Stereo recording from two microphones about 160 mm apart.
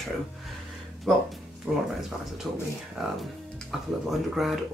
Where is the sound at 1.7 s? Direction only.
10° right (ahead or behind).